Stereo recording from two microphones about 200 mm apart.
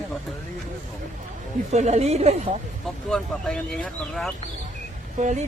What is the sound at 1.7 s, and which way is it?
Speech, 35° right (ahead or behind).